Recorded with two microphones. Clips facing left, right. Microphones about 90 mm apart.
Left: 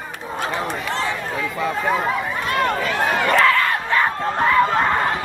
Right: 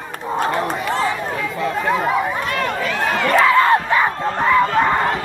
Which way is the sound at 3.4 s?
20° right (ahead or behind).